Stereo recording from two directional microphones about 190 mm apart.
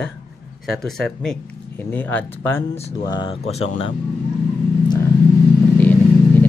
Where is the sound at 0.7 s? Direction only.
Centre (ahead or behind).